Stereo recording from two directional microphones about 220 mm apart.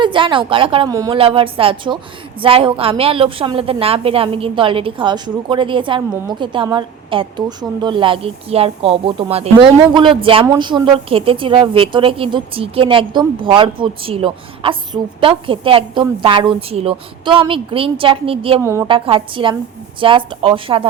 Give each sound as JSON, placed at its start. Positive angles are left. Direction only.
{"t": 0.0, "sound": "a woman's voice", "side_deg": -20}
{"t": 18.6, "sound": "a woman's voice", "side_deg": -10}
{"t": 18.9, "sound": "a woman's voice", "side_deg": -25}